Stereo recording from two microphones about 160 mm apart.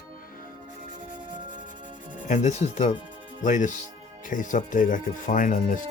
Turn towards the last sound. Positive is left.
turn(degrees=55)  # may be behind; listen again after turning